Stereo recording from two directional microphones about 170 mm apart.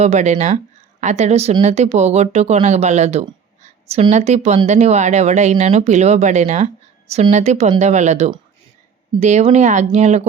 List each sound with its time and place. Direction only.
0.0 s speech: 40° right (ahead or behind)